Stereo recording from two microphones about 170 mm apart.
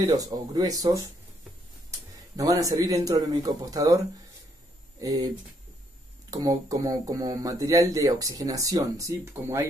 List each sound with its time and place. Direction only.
0.0 s speech: 20° right (ahead or behind)
6.3 s speech: 20° right (ahead or behind)